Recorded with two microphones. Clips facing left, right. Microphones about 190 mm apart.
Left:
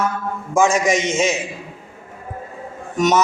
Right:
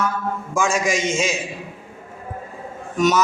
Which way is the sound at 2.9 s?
20° left (ahead or behind).